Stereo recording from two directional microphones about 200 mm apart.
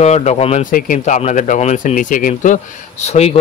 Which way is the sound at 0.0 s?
35° left (ahead or behind).